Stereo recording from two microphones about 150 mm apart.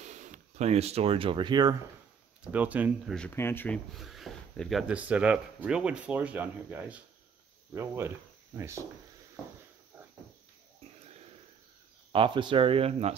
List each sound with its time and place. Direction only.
0.0 s speech: 55° right (ahead or behind); by 1.8 s 30° right (ahead or behind)
2.4 s speech: 10° right (ahead or behind)
3.1 s speech: 5° left (ahead or behind); by 8.8 s 20° right (ahead or behind)
9.9 s cricket: 10° right (ahead or behind)
12.1 s speech: 35° right (ahead or behind)